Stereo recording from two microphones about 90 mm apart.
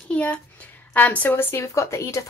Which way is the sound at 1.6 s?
35° left (ahead or behind).